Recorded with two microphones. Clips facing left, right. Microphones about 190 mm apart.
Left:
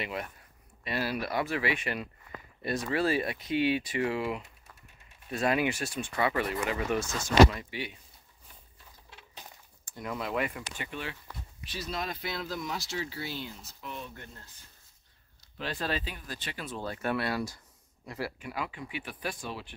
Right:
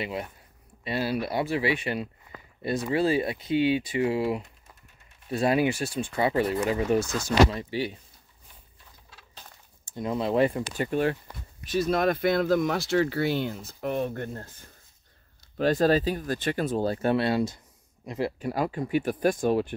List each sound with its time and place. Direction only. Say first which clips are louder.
0.0 s speech: right 4 dB; 30° right (ahead or behind)
9.1 s a sound: left 1 dB; 15° left (ahead or behind)
9.8 s speech: right 8 dB; 25° right (ahead or behind)
18.4 s speech: right 9 dB; 40° right (ahead or behind)